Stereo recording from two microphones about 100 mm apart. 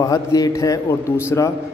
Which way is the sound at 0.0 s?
35° left (ahead or behind).